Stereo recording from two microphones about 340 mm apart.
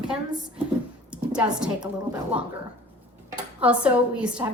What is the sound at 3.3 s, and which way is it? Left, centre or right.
Speech, centre.